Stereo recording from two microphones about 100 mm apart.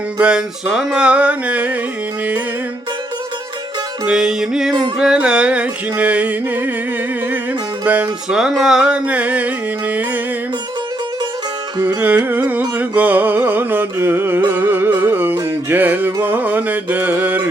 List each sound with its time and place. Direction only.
0.2 s music: 10° right (ahead or behind)
4.0 s music: 5° right (ahead or behind)
7.9 s music: 15° right (ahead or behind)
11.9 s carnatic music: 20° right (ahead or behind)
14.5 s music: 20° right (ahead or behind)
15.7 s carnatic music: 20° right (ahead or behind)
16.2 s music: 15° right (ahead or behind)